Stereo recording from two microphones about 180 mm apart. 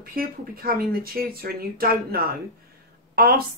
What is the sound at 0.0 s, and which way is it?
Speech, 55° right (ahead or behind).